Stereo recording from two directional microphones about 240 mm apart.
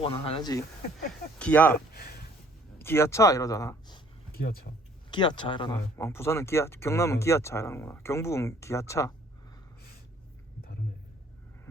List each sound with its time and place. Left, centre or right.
0.0 s speech: left
0.9 s speech: centre
1.9 s a sound: left
2.7 s speech: centre
4.3 s speech: left
5.1 s speech: centre